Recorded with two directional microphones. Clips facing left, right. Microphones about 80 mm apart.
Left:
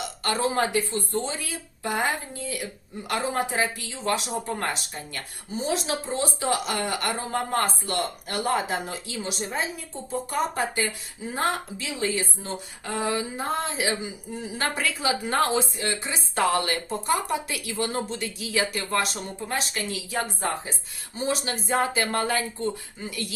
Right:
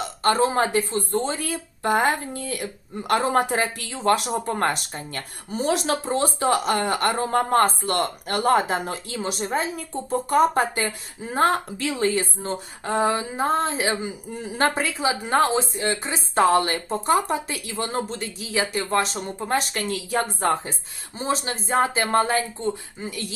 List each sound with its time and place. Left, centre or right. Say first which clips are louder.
0.2 s speech: right 5 dB; right
5.5 s speech: right 4 dB; right
14.8 s speech: right 2 dB; right
21.2 s speech: right 2 dB; right